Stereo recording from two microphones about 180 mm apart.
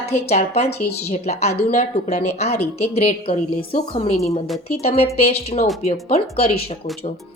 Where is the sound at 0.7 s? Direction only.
65° left (ahead or behind).